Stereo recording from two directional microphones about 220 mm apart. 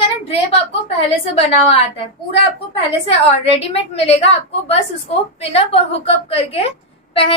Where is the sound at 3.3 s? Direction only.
30° left (ahead or behind).